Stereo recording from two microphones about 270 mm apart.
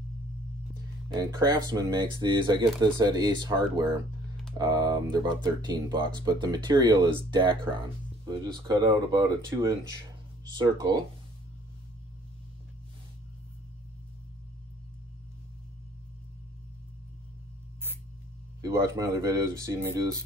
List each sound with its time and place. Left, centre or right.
1.0 s speech: centre
18.6 s speech: centre